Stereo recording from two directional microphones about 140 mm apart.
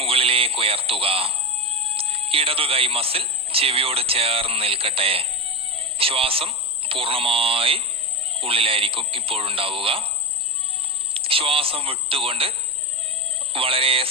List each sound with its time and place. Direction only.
0.0 s a sound: 45° right (ahead or behind)
1.8 s speech: 40° right (ahead or behind)
11.1 s a man's voice: 40° right (ahead or behind)